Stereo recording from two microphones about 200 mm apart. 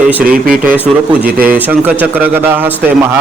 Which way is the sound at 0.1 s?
5° right (ahead or behind).